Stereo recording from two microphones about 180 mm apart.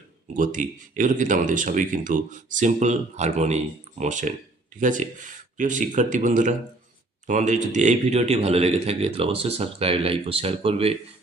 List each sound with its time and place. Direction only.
0.3 s a man's voice: 45° right (ahead or behind)